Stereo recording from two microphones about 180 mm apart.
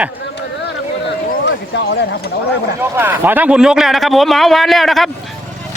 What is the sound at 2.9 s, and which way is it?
A man's voice, 10° right (ahead or behind).